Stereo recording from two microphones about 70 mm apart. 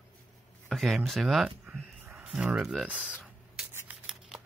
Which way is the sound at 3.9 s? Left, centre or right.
Right.